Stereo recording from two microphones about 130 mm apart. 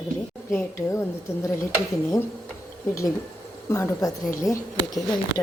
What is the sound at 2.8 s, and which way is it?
A woman's voice, 25° left (ahead or behind).